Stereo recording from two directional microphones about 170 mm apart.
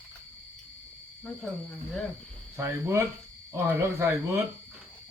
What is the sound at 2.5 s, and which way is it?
Speech, 15° right (ahead or behind).